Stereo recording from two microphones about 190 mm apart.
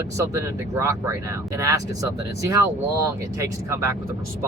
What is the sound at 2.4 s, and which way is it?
Speech, 15° right (ahead or behind).